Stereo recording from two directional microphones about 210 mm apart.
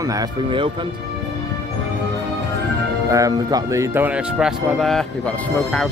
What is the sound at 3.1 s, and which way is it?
Speech, 15° right (ahead or behind).